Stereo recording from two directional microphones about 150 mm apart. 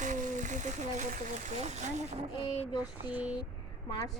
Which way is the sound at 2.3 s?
35° left (ahead or behind).